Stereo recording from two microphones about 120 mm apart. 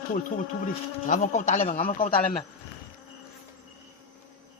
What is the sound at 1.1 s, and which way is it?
Speech, 80° left.